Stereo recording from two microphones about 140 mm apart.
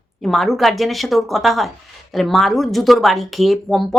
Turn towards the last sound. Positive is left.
turn(degrees=0)  # may be behind; listen again after turning